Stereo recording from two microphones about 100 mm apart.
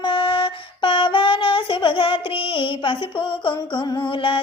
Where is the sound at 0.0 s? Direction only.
55° left (ahead or behind).